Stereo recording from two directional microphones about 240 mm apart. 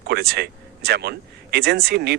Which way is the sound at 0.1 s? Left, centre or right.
Right.